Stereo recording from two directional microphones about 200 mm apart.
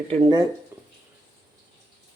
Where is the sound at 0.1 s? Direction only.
20° right (ahead or behind).